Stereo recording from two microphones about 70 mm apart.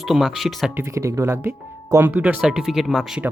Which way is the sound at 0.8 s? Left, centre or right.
Right.